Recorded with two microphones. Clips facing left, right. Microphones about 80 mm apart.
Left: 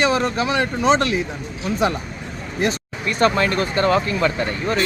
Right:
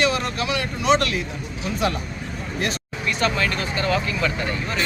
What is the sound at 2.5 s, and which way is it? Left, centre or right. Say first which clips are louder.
Speech: left 5 dB; left.